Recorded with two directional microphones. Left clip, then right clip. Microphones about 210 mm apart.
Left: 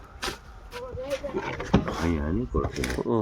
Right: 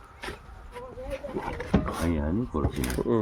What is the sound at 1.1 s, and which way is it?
Vehicle, 55° left (ahead or behind).